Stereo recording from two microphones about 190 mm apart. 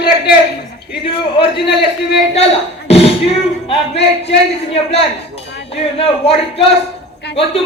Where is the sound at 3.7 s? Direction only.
30° left (ahead or behind).